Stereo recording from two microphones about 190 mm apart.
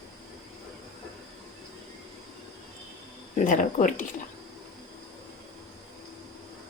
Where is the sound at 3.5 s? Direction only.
45° left (ahead or behind).